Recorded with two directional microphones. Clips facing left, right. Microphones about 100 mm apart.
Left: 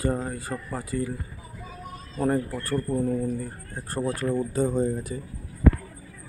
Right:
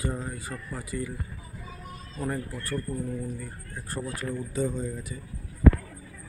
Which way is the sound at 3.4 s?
35° left (ahead or behind).